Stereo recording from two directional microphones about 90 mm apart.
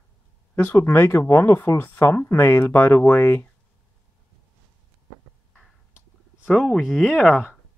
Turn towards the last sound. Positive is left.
turn(degrees=0)  # may be behind; listen again after turning